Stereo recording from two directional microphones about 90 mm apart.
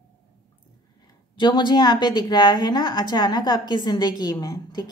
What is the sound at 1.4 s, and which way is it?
A woman's voice, 60° left (ahead or behind).